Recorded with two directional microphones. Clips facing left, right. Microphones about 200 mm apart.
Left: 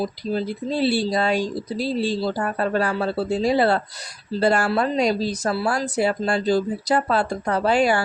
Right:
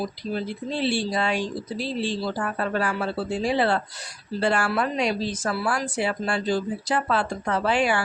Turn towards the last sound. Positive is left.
turn(degrees=40)  # may be behind; listen again after turning